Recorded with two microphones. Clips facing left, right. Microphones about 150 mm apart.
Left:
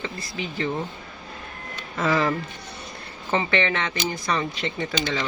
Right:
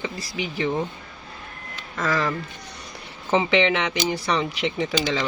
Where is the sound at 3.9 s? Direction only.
Centre (ahead or behind).